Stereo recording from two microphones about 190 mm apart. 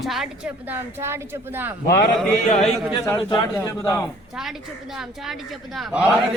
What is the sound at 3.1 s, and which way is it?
Speech, 25° left (ahead or behind).